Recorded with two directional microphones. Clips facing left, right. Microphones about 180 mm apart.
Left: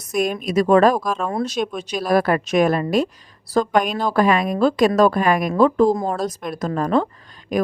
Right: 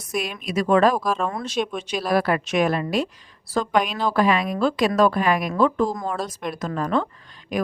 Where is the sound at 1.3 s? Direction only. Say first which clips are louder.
Left 3 dB; 35° left (ahead or behind).